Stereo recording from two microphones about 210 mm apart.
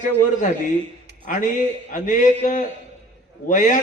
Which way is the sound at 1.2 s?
40° left (ahead or behind).